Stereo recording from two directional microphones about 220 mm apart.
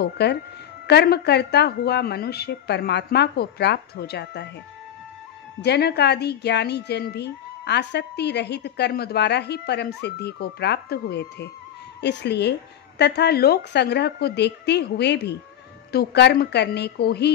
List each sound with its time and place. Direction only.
0.0 s a woman's voice: 50° left (ahead or behind)
5.6 s a woman's voice: 50° left (ahead or behind)